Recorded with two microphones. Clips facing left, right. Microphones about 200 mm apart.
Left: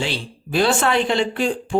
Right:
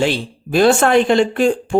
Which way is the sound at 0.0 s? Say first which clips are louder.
Right 8 dB; 50° right (ahead or behind).